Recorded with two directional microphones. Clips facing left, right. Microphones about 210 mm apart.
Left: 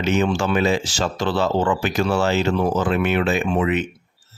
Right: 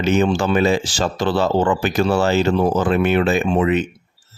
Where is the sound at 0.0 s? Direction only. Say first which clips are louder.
Right 3 dB; 35° right (ahead or behind).